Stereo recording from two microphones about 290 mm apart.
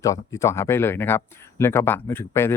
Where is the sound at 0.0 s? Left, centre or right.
Centre.